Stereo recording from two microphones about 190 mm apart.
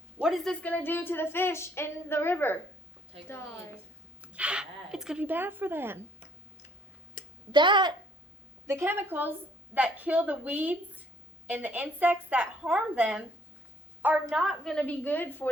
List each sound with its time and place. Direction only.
0.2 s a woman's voice: centre (ahead or behind)
0.6 s a woman's voice: 10° left (ahead or behind)
4.2 s speech: 5° right (ahead or behind)
7.2 s a sound: 45° left (ahead or behind)
7.5 s speech: 25° right (ahead or behind)
8.6 s a woman's voice: 15° right (ahead or behind); by 15.4 s 10° left (ahead or behind)